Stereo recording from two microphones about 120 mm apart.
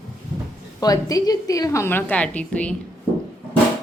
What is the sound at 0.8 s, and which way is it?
A woman's voice, 30° left (ahead or behind).